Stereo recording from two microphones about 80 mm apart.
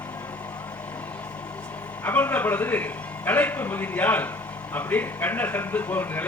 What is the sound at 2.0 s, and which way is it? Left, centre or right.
Speech, left.